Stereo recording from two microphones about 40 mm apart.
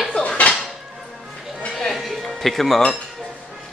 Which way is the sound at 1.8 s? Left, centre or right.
Centre.